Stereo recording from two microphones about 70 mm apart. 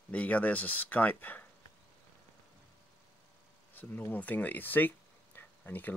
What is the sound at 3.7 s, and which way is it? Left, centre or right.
Speech, left.